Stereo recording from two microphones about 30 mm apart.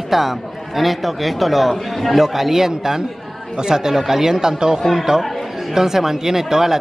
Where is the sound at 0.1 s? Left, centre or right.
Centre.